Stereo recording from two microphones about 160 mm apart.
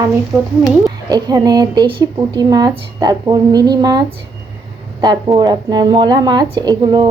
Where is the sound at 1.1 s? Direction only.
25° right (ahead or behind).